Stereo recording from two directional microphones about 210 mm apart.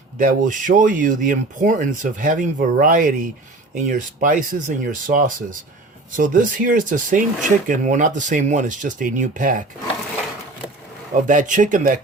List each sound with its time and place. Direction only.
0.2 s speech: 40° right (ahead or behind)
11.1 s speech: 40° right (ahead or behind)